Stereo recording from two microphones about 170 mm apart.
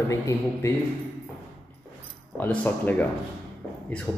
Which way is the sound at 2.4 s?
10° left (ahead or behind).